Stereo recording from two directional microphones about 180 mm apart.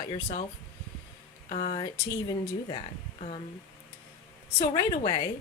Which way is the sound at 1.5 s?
35° left (ahead or behind).